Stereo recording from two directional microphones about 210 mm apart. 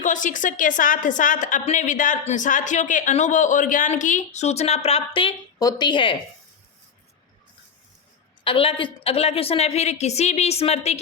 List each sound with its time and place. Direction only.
0.0 s a woman's voice: 40° left (ahead or behind)
8.4 s a woman's voice: 25° left (ahead or behind)